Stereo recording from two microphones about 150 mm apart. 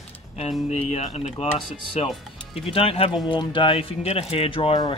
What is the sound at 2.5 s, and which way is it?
Speech, 40° left (ahead or behind).